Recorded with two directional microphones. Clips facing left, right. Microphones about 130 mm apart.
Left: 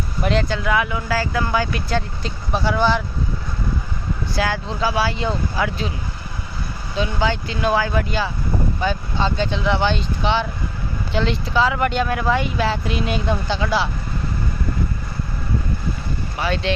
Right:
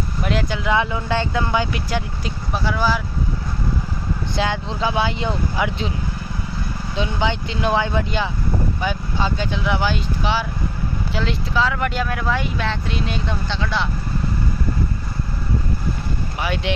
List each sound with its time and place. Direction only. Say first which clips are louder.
0.2 s speech: left 3 dB; 10° right (ahead or behind)
0.7 s speech: right 1 dB; 25° right (ahead or behind)
2.5 s speech: left 3 dB; centre (ahead or behind)
4.4 s speech: even; 20° right (ahead or behind)
7.0 s speech: left 1 dB; 20° right (ahead or behind); by 13.8 s 10° left (ahead or behind)
16.3 s speech: left 2 dB; 15° right (ahead or behind)